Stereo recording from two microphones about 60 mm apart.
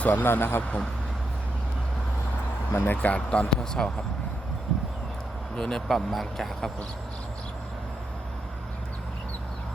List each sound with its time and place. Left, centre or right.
0.0 s speech: left
0.3 s speech: left
2.8 s speech: left; by 3.9 s centre
5.5 s speech: centre